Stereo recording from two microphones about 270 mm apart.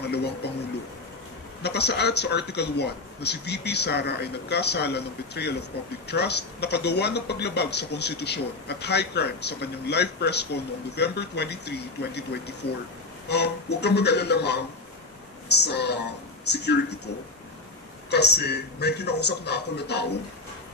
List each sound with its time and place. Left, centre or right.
0.0 s a sound: left
1.6 s a man's voice: left
15.6 s a man's voice: left
18.1 s a man's voice: left